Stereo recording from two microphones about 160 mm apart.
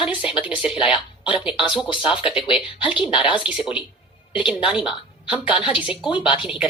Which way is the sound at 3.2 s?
5° right (ahead or behind).